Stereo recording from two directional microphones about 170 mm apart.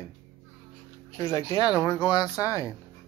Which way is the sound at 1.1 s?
20° left (ahead or behind).